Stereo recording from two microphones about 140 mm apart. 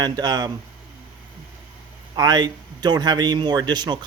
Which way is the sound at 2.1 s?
30° right (ahead or behind).